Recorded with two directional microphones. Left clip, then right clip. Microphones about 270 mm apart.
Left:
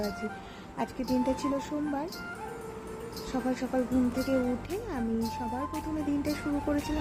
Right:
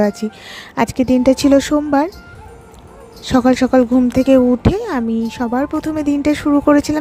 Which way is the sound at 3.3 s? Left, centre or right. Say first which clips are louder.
Right 19 dB; right.